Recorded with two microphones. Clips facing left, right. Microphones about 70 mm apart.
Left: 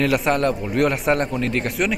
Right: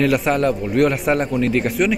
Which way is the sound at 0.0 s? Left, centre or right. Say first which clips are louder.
Right 2 dB; centre.